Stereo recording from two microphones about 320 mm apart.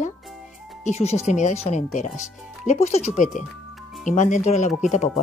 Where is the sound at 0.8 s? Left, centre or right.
Centre.